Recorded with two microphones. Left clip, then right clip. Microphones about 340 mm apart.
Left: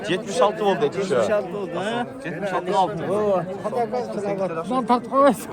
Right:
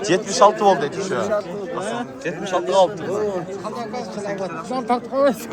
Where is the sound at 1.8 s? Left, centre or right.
Left.